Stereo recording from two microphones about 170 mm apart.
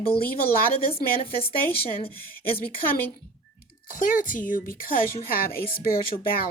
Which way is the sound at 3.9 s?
50° left (ahead or behind).